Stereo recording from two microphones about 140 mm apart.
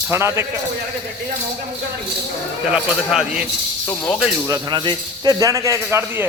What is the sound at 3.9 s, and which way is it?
Speech, 15° left (ahead or behind).